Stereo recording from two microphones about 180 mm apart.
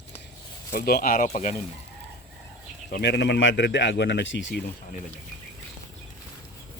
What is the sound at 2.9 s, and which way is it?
Speech, 70° left (ahead or behind).